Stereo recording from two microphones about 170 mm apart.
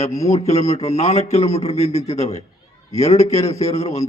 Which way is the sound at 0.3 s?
40° left (ahead or behind).